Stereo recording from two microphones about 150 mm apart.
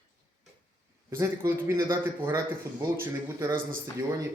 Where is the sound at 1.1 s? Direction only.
15° right (ahead or behind).